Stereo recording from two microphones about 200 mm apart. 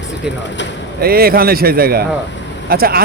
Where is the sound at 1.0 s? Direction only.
50° right (ahead or behind).